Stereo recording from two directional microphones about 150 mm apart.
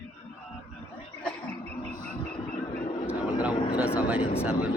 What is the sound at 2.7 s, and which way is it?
Vehicle, 55° left (ahead or behind).